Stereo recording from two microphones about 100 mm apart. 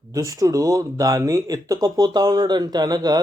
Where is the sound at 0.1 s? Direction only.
35° right (ahead or behind).